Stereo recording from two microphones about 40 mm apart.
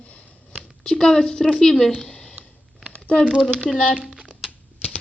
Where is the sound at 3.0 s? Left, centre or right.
Left.